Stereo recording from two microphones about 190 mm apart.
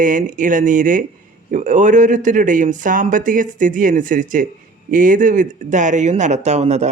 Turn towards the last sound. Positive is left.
turn(degrees=-35)  # may be behind; listen again after turning